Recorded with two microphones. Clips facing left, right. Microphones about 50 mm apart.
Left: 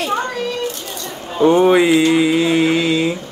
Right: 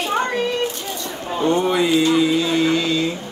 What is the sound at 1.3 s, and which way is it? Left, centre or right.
Speech, centre.